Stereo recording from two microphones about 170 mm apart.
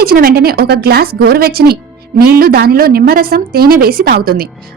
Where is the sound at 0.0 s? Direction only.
60° right (ahead or behind).